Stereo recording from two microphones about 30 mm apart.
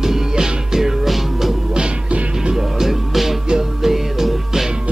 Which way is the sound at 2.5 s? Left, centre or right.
Centre.